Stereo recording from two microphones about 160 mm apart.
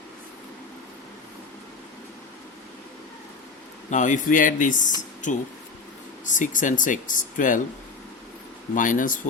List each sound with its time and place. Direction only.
3.8 s speech: 50° left (ahead or behind)
8.7 s speech: 55° left (ahead or behind)